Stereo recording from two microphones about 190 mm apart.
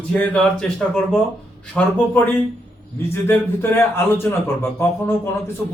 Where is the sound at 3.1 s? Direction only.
10° left (ahead or behind).